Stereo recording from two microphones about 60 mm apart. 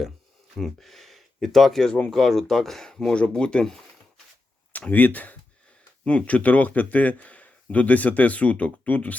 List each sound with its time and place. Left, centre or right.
0.6 s speech: centre
4.9 s speech: left